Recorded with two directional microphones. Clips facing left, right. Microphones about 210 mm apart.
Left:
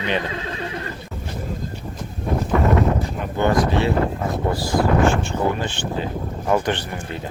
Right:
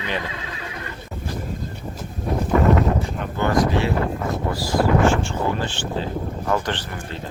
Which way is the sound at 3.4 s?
20° left (ahead or behind).